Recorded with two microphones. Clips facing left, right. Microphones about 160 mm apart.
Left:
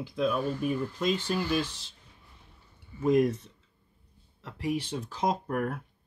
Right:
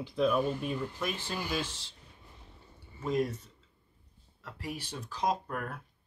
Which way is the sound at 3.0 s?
20° left (ahead or behind).